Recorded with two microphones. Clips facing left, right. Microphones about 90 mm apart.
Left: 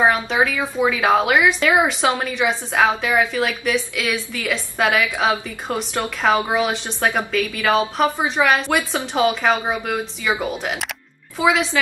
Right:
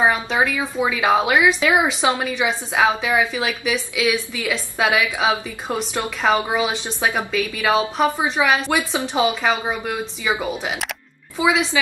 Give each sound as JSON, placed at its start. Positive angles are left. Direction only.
{"t": 0.0, "sound": "a woman's voice", "side_deg": -5}